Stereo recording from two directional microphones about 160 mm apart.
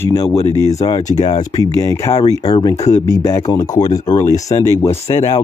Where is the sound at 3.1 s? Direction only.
15° left (ahead or behind).